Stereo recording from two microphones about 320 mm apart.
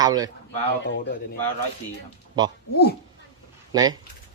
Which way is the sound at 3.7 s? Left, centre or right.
Centre.